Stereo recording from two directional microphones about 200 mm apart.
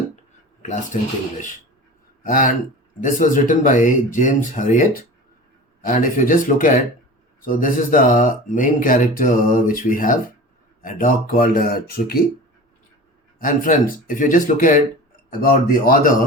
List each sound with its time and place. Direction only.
0.9 s speech: 40° left (ahead or behind)
2.2 s speech: 45° left (ahead or behind)
13.4 s speech: 40° left (ahead or behind)